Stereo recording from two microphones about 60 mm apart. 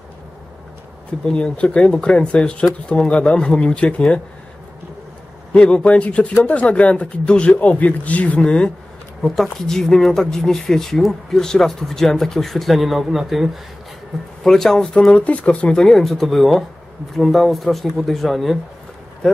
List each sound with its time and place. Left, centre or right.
1.2 s speech: centre
5.5 s speech: centre
14.4 s speech: centre
15.1 s speech: left; by 18.6 s centre
19.2 s speech: centre